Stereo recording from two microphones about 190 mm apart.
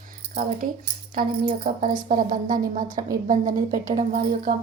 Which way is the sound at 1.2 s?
50° right (ahead or behind).